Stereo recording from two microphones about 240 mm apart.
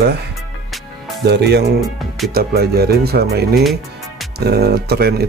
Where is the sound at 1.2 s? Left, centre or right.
Right.